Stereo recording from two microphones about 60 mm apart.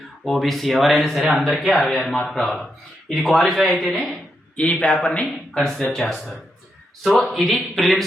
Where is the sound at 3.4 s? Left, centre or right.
Centre.